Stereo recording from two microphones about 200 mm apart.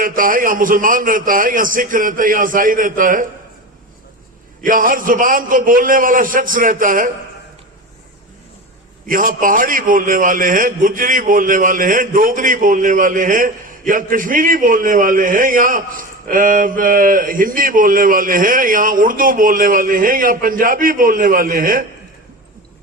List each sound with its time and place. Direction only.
0.0 s a man's voice: 45° right (ahead or behind)
4.6 s a man's voice: 45° right (ahead or behind)
9.0 s a man's voice: 45° right (ahead or behind)